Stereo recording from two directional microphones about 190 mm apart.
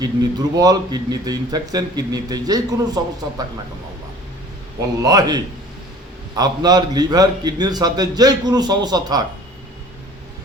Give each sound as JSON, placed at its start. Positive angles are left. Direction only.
{"t": 0.0, "sound": "a man's voice", "side_deg": -20}
{"t": 5.0, "sound": "a man's voice", "side_deg": -20}